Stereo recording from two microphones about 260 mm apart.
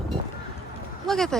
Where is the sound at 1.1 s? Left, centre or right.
Centre.